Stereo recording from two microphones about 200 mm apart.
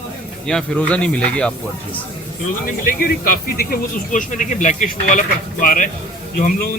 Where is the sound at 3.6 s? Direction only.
45° left (ahead or behind).